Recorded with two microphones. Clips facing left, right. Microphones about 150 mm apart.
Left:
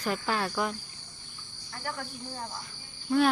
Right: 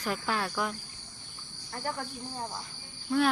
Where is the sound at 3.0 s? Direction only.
Centre (ahead or behind).